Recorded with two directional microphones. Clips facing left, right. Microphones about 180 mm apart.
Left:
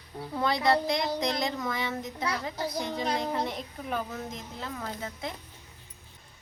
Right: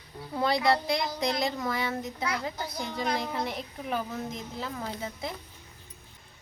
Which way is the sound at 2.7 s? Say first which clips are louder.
Even; 35° left (ahead or behind).